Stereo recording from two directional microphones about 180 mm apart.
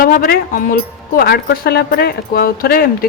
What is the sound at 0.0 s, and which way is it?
Speech, 55° left (ahead or behind).